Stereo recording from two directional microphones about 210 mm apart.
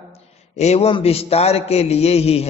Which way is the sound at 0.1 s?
30° left (ahead or behind).